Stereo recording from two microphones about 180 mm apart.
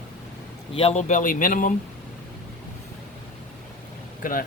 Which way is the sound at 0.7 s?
35° left (ahead or behind).